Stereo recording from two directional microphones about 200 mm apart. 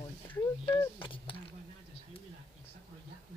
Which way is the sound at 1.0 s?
25° left (ahead or behind).